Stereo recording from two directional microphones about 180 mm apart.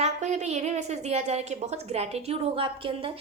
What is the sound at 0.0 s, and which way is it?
A woman's voice, 40° right (ahead or behind).